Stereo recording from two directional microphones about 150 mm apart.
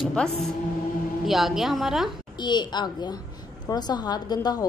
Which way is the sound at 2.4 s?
30° left (ahead or behind).